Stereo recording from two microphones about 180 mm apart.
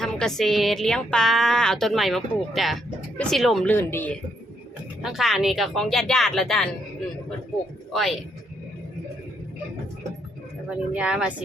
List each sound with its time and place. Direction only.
0.0 s a woman's voice: 5° left (ahead or behind)
5.0 s a woman's voice: centre (ahead or behind)
10.7 s a woman's voice: 5° right (ahead or behind)